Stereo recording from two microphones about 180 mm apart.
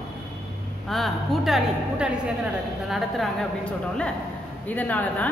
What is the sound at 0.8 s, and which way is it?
A woman's voice, centre (ahead or behind).